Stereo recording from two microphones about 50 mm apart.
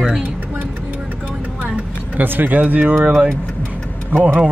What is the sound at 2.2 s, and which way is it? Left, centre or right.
Speech, right.